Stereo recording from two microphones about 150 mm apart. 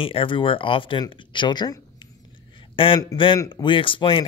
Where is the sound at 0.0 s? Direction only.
35° left (ahead or behind).